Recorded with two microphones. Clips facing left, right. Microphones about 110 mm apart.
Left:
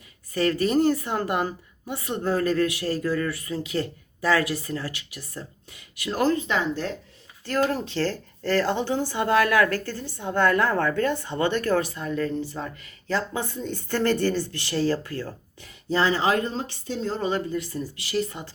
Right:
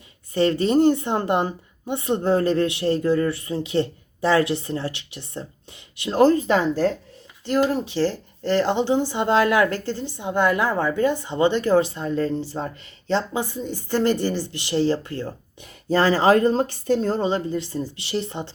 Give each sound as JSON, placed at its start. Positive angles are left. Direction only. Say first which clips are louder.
{"t": 0.3, "sound": "speech", "louder": "right 3 dB", "side_deg": -25}
{"t": 7.4, "sound": "a woman's voice", "louder": "right 3 dB", "side_deg": -20}
{"t": 13.3, "sound": "a woman's voice", "louder": "right 3 dB", "side_deg": -10}
{"t": 15.9, "sound": "speech", "louder": "right 5 dB", "side_deg": -45}
{"t": 17.2, "sound": "speech", "louder": "right 3 dB", "side_deg": -25}